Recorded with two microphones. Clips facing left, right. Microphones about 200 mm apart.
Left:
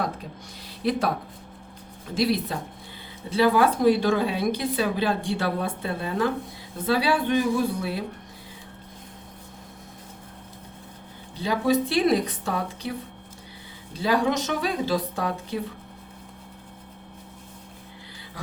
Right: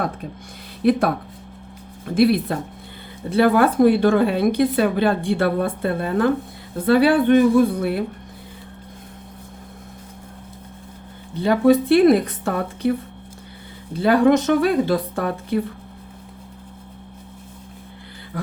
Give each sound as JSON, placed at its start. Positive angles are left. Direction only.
{"t": 0.8, "sound": "a woman's voice", "side_deg": -55}
{"t": 11.3, "sound": "a woman's voice", "side_deg": -55}
{"t": 14.0, "sound": "a woman's voice", "side_deg": -55}